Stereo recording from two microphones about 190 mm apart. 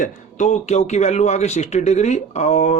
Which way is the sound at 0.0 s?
40° left (ahead or behind).